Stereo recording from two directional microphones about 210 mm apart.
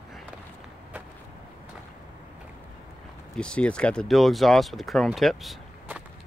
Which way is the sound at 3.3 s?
5° left (ahead or behind).